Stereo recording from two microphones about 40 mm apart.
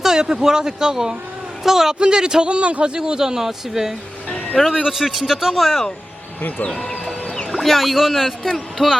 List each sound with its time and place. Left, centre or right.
0.0 s speech: centre
2.0 s speech: right
3.0 s speech: centre
7.5 s speech: centre
8.4 s speech: centre